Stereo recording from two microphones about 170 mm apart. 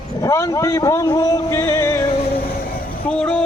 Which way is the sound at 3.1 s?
5° left (ahead or behind).